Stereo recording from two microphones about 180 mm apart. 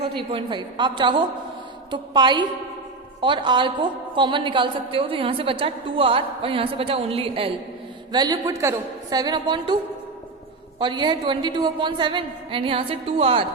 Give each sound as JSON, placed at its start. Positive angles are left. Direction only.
{"t": 0.2, "sound": "a woman's voice", "side_deg": -25}
{"t": 10.8, "sound": "a woman's voice", "side_deg": -25}